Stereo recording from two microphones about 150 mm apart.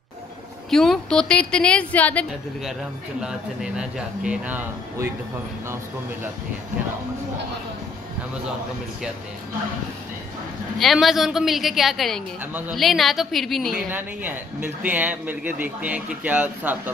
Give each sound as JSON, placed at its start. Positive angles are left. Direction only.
{"t": 0.7, "sound": "a woman's voice", "side_deg": 0}
{"t": 3.2, "sound": "a man's voice", "side_deg": -5}
{"t": 10.8, "sound": "a woman's voice", "side_deg": 0}
{"t": 13.8, "sound": "a man's voice", "side_deg": -10}